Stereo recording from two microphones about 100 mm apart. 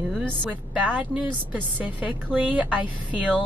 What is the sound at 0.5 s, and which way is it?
A woman's voice, 15° right (ahead or behind).